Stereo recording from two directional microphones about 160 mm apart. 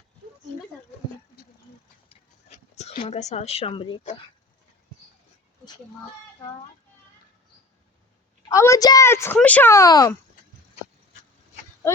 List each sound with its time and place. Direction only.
2.0 s a sound: 45° left (ahead or behind)
4.0 s speech: 40° left (ahead or behind)
8.4 s a woman's voice: 20° left (ahead or behind)